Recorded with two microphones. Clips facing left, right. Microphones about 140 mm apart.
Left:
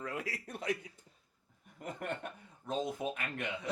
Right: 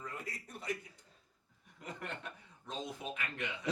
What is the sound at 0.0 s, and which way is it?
Speech, 90° left.